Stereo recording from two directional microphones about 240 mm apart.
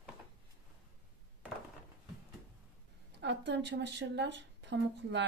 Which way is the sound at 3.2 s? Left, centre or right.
Right.